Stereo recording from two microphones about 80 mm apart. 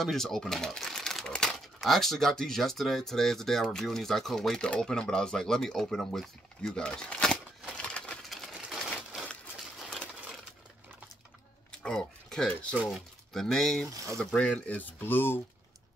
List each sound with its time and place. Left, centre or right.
0.0 s shuffling cards: centre
1.8 s speech: centre
7.7 s crushing: centre
8.8 s a sound: centre
11.8 s a sound: centre
13.3 s speech: centre
14.3 s speech: centre